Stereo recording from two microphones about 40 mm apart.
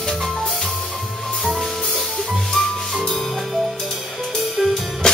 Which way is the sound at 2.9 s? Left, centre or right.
Centre.